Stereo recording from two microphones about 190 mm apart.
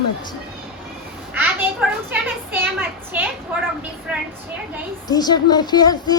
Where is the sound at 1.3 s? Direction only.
10° right (ahead or behind).